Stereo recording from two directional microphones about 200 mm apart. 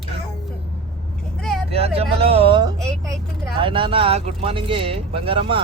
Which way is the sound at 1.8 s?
30° right (ahead or behind).